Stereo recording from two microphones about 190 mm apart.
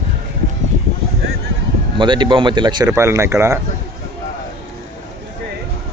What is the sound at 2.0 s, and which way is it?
Speech, 25° right (ahead or behind).